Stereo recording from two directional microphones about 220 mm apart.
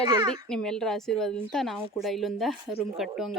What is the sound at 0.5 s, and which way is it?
A woman's voice, 5° left (ahead or behind).